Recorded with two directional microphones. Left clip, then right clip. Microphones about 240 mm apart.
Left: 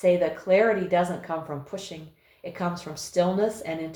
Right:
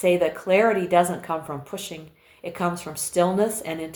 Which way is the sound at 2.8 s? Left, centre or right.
Right.